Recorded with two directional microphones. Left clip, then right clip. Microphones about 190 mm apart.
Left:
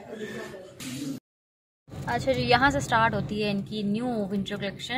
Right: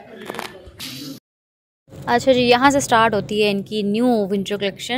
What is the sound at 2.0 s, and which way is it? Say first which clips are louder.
A woman's voice: right 10 dB; 50° right (ahead or behind).